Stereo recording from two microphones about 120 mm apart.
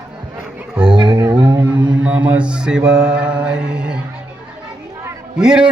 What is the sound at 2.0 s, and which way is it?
Mantra, 10° right (ahead or behind).